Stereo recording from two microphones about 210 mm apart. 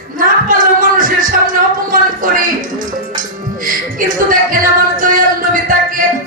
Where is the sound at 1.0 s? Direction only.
40° right (ahead or behind).